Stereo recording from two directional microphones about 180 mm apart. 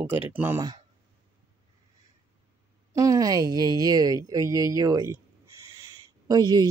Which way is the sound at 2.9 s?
20° right (ahead or behind).